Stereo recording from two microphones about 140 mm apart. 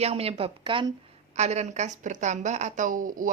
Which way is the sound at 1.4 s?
55° right (ahead or behind).